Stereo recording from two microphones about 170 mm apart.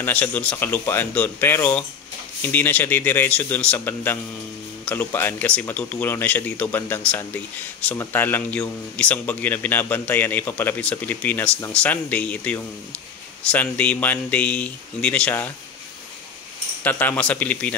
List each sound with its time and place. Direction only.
0.0 s speech: 10° left (ahead or behind)
16.8 s speech: 10° left (ahead or behind)